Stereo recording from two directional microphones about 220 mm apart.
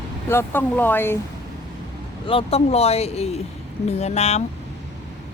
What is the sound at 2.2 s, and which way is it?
Speech, 25° left (ahead or behind).